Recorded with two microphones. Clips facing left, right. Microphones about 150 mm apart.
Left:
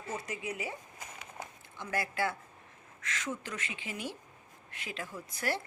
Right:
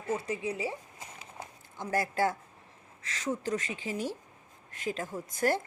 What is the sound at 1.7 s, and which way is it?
A woman's voice, 40° right (ahead or behind).